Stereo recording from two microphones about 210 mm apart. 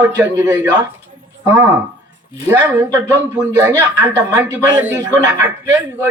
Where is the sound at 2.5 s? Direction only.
10° right (ahead or behind).